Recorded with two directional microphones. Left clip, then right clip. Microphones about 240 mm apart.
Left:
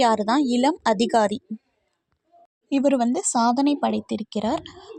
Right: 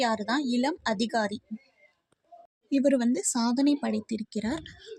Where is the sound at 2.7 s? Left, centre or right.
Left.